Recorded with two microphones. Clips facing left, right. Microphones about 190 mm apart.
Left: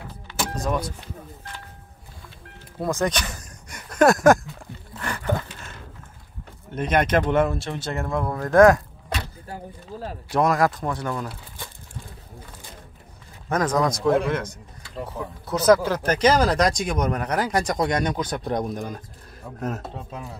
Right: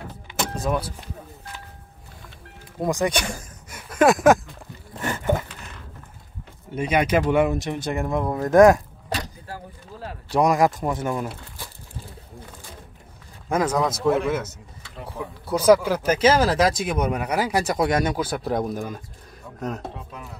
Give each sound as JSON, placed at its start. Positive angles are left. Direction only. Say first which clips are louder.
{"t": 0.3, "sound": "vehicle", "louder": "right 1 dB", "side_deg": -5}
{"t": 2.8, "sound": "speech", "louder": "right 1 dB", "side_deg": -15}
{"t": 3.3, "sound": "a sound", "louder": "right 1 dB", "side_deg": -5}
{"t": 5.0, "sound": "a sound", "louder": "right 3 dB", "side_deg": -20}
{"t": 6.7, "sound": "speech", "louder": "even", "side_deg": -10}
{"t": 10.3, "sound": "speech", "louder": "right 2 dB", "side_deg": -15}
{"t": 13.5, "sound": "speech", "louder": "even", "side_deg": -10}